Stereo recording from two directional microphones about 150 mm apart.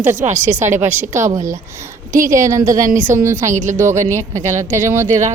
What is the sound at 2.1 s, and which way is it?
Speech, 55° right (ahead or behind).